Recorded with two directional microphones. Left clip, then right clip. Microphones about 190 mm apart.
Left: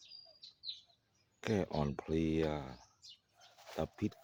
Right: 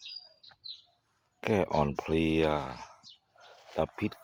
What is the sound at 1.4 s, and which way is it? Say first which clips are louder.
Speech: right 9 dB; 15° right (ahead or behind).